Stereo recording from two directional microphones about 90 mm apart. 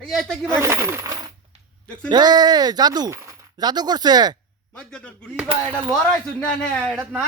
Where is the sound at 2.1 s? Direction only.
50° right (ahead or behind).